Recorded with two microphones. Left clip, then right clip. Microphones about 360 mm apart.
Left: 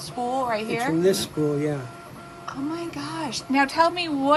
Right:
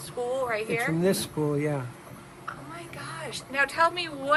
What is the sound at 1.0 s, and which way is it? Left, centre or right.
Speech, right.